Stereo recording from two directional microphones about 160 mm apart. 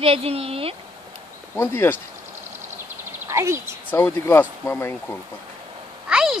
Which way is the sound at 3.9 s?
15° left (ahead or behind).